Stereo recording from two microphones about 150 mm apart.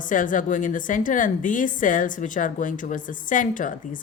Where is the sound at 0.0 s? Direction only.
60° left (ahead or behind).